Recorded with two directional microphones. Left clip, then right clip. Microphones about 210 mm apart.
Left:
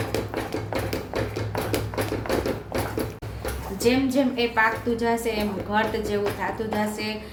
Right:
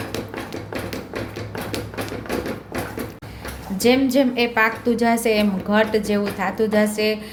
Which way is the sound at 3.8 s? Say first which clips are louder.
Right 5 dB; 45° right (ahead or behind).